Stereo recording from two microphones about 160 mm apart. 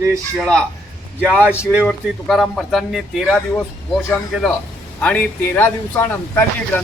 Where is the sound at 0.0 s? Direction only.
15° right (ahead or behind).